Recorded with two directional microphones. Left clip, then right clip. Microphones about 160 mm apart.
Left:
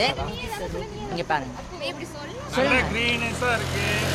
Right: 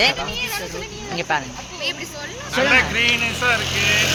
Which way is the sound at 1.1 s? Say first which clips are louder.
Right 4 dB; 20° right (ahead or behind).